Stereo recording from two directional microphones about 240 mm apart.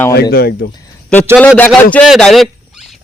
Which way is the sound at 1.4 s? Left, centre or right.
Centre.